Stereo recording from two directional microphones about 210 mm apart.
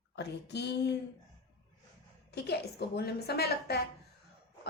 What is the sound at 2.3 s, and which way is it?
A woman's voice, 50° left (ahead or behind).